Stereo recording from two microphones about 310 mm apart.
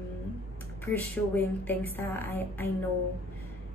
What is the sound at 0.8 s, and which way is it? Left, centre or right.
A woman's voice, centre.